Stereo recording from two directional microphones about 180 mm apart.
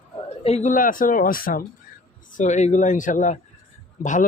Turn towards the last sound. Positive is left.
turn(degrees=45)  # may be behind; listen again after turning